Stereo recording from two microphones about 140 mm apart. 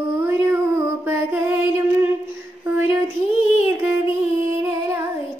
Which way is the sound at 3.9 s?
15° right (ahead or behind).